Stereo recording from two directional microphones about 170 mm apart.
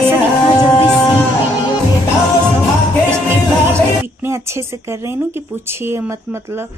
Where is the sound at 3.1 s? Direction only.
15° right (ahead or behind).